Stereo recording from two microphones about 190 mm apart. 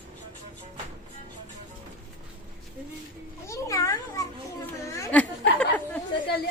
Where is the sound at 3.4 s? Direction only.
15° left (ahead or behind).